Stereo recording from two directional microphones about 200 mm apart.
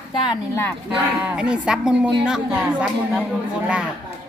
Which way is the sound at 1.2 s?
5° right (ahead or behind).